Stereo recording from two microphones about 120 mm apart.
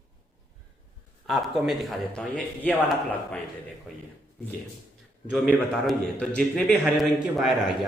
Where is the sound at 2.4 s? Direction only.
10° left (ahead or behind).